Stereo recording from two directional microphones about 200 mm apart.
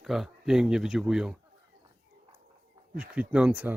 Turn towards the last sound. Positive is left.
turn(degrees=-10)  # may be behind; listen again after turning